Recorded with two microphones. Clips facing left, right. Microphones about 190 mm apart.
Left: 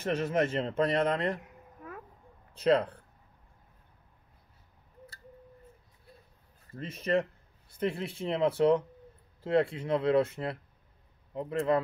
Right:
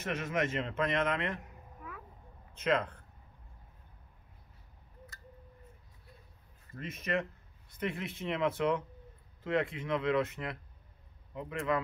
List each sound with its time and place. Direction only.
0.0 s a man's voice: 35° left (ahead or behind)
6.7 s speech: 30° left (ahead or behind)